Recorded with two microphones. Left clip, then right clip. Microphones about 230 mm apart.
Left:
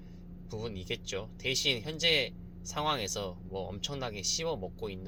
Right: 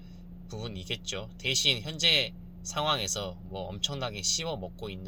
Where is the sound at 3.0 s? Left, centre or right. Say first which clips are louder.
Right 3 dB; right.